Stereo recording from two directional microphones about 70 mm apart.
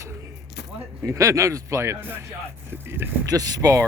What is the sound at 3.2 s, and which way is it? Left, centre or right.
Speech, right.